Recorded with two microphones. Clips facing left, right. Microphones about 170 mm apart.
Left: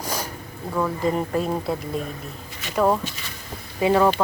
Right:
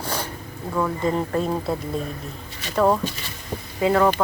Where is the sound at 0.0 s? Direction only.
10° left (ahead or behind).